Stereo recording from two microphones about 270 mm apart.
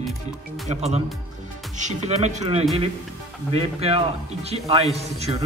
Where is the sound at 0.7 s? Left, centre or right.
Right.